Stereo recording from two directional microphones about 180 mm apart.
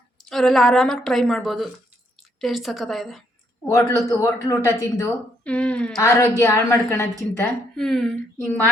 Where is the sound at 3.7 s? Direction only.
15° left (ahead or behind).